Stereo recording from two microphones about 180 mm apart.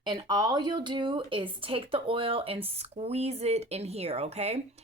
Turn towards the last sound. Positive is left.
turn(degrees=-35)  # may be behind; listen again after turning